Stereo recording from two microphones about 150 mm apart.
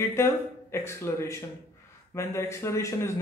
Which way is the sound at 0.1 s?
15° left (ahead or behind).